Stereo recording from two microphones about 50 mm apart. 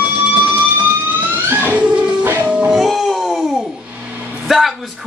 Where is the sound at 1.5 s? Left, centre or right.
Right.